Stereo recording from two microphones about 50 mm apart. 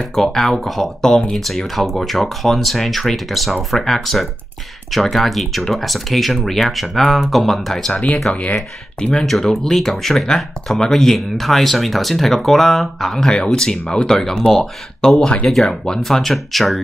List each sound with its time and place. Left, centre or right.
0.0 s speech: centre
7.9 s speech: left
9.2 s speech: centre